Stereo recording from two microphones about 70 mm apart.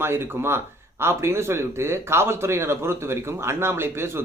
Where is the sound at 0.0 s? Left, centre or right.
Right.